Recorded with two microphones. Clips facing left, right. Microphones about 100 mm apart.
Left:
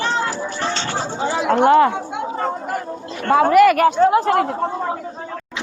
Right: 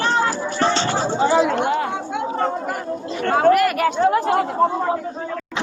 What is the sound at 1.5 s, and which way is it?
Speech, 80° left.